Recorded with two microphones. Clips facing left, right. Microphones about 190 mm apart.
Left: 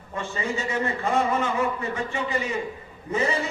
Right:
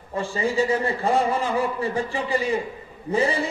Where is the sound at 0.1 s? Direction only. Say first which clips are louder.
Right 4 dB; 30° right (ahead or behind).